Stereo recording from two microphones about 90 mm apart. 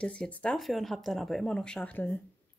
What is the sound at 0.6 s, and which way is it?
Speech, centre (ahead or behind).